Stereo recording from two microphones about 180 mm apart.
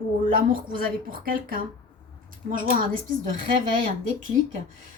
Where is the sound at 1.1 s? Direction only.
50° right (ahead or behind).